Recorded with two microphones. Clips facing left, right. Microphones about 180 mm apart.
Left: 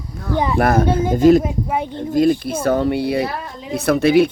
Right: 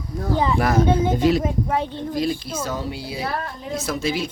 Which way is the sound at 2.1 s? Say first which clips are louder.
Left 9 dB; 55° left (ahead or behind).